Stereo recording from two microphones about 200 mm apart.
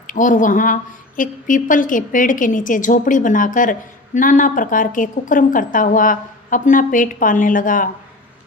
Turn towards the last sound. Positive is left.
turn(degrees=40)  # may be behind; listen again after turning